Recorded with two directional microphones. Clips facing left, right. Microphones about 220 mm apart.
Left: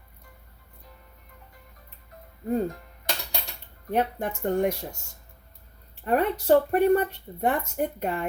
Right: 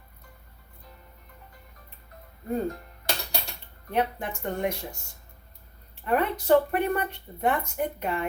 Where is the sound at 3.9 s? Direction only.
40° left (ahead or behind).